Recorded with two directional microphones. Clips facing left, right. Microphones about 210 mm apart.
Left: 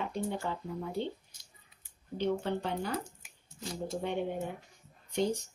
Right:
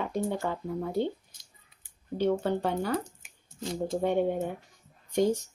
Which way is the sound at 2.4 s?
45° right (ahead or behind).